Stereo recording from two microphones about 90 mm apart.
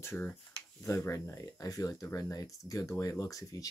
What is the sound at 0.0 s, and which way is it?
Speech, 30° left (ahead or behind).